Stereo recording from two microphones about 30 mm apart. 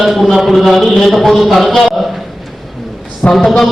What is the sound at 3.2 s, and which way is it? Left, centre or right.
Speech, left.